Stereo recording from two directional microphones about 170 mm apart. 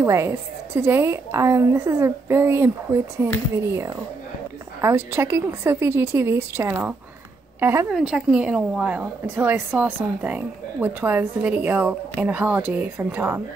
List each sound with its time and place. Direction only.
0.0 s a woman's voice: 15° right (ahead or behind)